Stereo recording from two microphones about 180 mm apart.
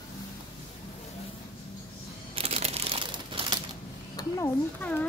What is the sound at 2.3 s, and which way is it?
Crumpling, 35° right (ahead or behind).